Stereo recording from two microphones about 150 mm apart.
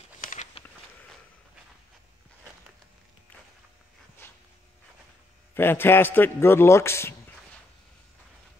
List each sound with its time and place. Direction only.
0.2 s a sound: 60° left (ahead or behind)
4.2 s walk: 15° left (ahead or behind)
5.5 s a man's voice: 15° left (ahead or behind)